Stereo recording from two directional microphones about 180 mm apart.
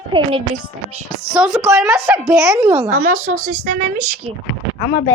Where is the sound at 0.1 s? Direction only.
30° right (ahead or behind).